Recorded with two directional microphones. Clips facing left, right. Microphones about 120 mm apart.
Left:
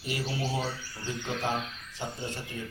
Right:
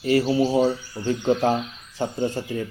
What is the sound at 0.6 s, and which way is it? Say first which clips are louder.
Speech: right 14 dB; 20° right (ahead or behind).